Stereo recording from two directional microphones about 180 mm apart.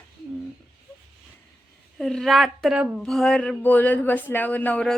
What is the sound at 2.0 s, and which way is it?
Speech, centre (ahead or behind).